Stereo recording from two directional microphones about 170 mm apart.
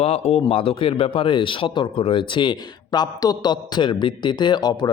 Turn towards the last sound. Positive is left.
turn(degrees=25)  # may be behind; listen again after turning